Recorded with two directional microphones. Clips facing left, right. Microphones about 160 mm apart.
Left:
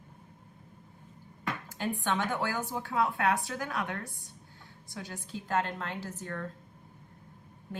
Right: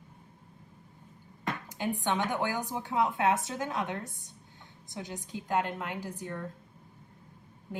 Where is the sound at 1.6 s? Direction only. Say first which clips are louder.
Right 1 dB; 20° right (ahead or behind).